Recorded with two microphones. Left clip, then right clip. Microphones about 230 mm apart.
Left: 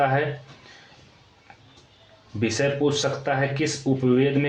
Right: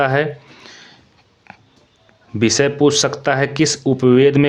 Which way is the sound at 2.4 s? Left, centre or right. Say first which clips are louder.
Right 8 dB; right.